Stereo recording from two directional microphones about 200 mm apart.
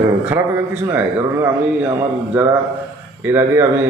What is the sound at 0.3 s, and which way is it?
A man's voice, 10° right (ahead or behind).